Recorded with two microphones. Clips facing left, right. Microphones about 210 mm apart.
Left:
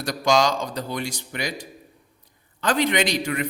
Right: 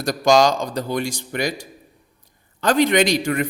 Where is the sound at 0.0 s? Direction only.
45° right (ahead or behind).